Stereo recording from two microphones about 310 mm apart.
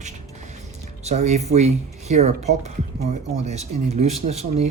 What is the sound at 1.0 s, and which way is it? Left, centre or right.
Speech, right.